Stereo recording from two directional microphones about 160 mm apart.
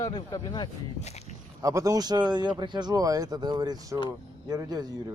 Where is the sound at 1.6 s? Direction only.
20° right (ahead or behind).